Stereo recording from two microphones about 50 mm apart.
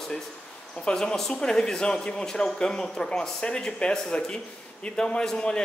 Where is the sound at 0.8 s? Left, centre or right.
Centre.